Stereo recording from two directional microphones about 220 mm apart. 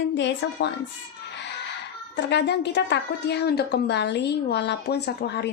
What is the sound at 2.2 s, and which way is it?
A woman's voice, 50° left (ahead or behind).